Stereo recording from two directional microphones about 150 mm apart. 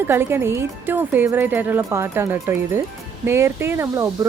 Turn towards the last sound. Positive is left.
turn(degrees=-15)  # may be behind; listen again after turning